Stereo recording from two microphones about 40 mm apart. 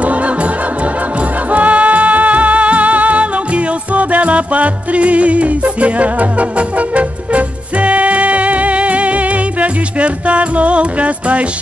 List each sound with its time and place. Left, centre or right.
0.0 s music: right
1.5 s music: right